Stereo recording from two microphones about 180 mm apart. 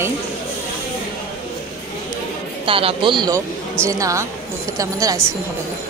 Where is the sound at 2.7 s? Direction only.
30° right (ahead or behind).